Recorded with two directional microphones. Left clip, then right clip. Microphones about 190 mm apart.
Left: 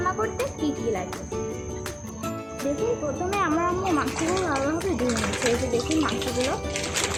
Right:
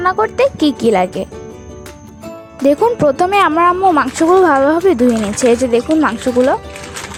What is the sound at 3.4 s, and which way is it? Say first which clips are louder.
Speech: right 11 dB; 55° right (ahead or behind).